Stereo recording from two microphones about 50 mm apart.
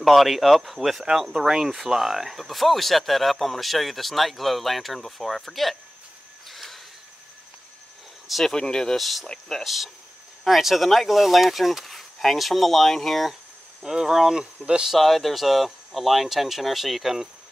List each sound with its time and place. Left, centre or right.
0.0 s speech: centre
6.5 s a sound: centre
8.3 s speech: centre
8.5 s speech: centre
10.4 s speech: centre
13.8 s speech: centre
14.4 s speech: right
14.8 s speech: centre